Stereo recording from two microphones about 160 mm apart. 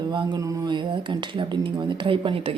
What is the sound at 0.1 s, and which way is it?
A woman's voice, 25° right (ahead or behind).